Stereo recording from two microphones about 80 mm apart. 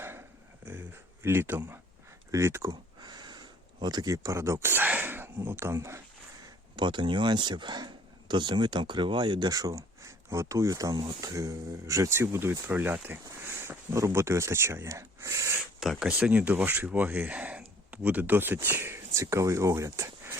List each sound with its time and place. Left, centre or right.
0.0 s a sound: right
2.3 s speech: right
2.6 s a sound: right
4.1 s speech: right
6.7 s speech: right
9.5 s speech: right
15.8 s speech: centre
16.0 s speech: centre; by 20.4 s right